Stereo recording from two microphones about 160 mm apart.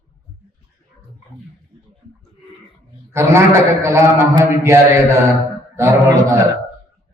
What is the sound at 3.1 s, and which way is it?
A man's voice, 15° right (ahead or behind).